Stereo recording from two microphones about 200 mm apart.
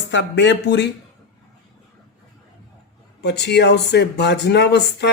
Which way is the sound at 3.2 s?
55° left (ahead or behind).